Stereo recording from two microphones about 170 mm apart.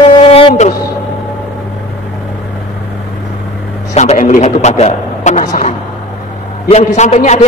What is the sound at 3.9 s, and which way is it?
A man's voice, 40° left (ahead or behind).